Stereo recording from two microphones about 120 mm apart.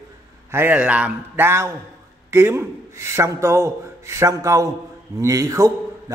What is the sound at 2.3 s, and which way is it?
A man's voice, 20° right (ahead or behind).